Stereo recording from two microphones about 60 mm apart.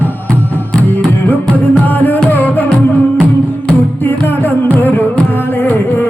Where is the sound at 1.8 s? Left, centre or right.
Left.